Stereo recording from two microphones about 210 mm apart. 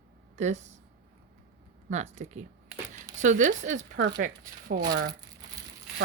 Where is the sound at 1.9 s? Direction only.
35° right (ahead or behind).